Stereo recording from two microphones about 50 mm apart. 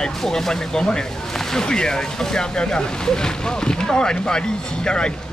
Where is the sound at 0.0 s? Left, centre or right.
Centre.